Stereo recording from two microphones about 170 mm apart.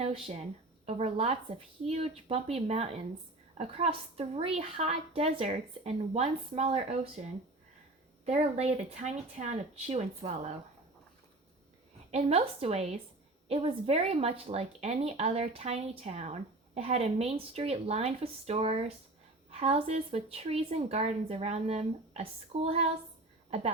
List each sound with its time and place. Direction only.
0.9 s speech: 35° right (ahead or behind)
12.1 s speech: 35° right (ahead or behind)